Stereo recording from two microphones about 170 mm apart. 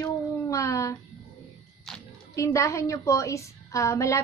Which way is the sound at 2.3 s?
20° left (ahead or behind).